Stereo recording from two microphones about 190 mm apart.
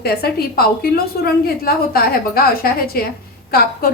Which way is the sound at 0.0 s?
55° left (ahead or behind).